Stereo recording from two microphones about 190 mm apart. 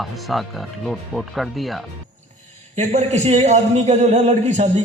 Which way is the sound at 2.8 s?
35° right (ahead or behind).